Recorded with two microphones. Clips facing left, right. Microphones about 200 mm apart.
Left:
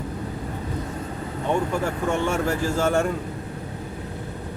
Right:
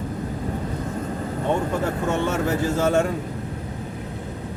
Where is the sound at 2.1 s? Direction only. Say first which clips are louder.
Even; 20° right (ahead or behind).